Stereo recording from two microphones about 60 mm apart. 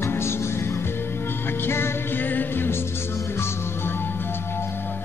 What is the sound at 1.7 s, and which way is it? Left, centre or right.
Music, left.